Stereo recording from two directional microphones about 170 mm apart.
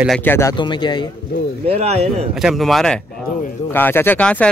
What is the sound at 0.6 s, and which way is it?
Speech, 30° left (ahead or behind).